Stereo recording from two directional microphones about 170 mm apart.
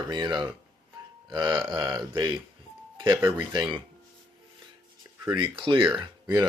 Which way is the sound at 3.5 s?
30° right (ahead or behind).